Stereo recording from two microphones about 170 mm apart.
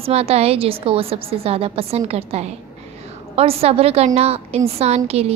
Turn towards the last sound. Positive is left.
turn(degrees=-35)  # may be behind; listen again after turning